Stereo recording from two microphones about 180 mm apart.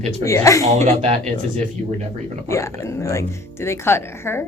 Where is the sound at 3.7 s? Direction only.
15° left (ahead or behind).